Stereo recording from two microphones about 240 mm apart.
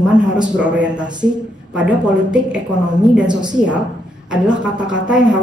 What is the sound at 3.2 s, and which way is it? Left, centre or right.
Speech, centre.